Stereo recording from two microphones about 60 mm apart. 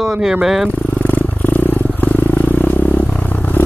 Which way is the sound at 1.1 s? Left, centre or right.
Left.